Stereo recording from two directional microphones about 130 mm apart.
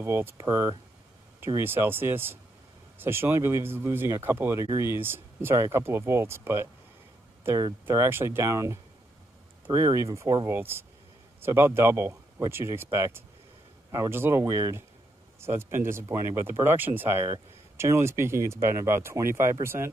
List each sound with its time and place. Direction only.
0.0 s speech: 15° right (ahead or behind)